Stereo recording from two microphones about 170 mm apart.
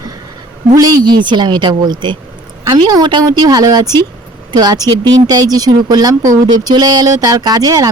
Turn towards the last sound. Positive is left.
turn(degrees=-20)  # may be behind; listen again after turning